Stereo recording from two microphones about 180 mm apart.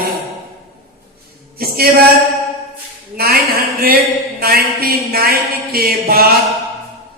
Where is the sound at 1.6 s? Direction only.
55° right (ahead or behind).